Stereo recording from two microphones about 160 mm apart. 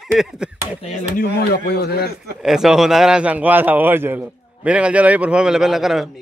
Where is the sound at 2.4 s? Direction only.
5° right (ahead or behind).